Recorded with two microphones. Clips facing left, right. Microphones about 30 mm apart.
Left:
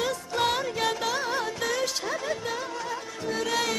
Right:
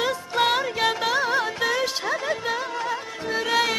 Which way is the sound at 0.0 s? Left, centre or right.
Right.